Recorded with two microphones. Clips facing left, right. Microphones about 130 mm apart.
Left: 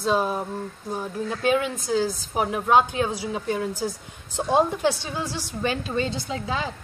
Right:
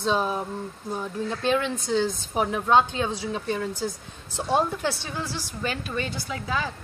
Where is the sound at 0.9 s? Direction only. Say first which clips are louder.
Left 1 dB; 10° left (ahead or behind).